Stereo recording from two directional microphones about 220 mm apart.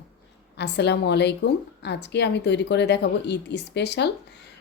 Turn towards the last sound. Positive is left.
turn(degrees=50)  # may be behind; listen again after turning